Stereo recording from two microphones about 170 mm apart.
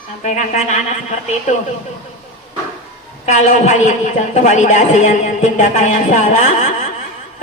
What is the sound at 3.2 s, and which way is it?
A woman's voice, 45° left (ahead or behind).